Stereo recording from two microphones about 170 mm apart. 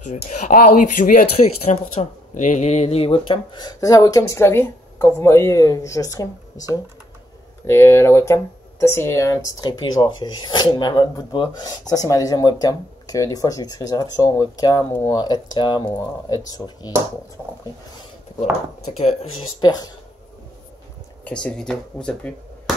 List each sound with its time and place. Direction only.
0.1 s speech: 45° left (ahead or behind)
1.3 s speech: 35° left (ahead or behind); by 6.2 s 20° left (ahead or behind)
7.6 s speech: 15° left (ahead or behind)
18.4 s speech: 40° left (ahead or behind)
19.6 s speech: 25° left (ahead or behind)
21.2 s speech: 5° left (ahead or behind)